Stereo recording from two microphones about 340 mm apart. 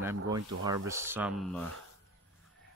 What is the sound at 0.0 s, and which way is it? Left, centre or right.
Speech, centre.